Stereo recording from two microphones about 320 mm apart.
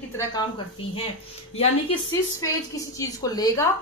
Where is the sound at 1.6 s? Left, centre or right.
Centre.